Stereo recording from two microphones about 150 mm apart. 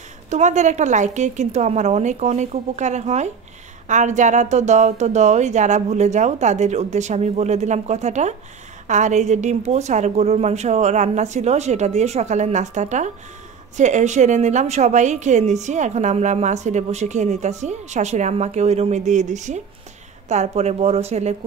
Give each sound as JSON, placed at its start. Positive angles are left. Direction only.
{"t": 0.3, "sound": "a woman's voice", "side_deg": -55}